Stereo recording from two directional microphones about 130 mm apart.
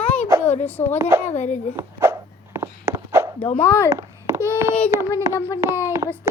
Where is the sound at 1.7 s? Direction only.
20° right (ahead or behind).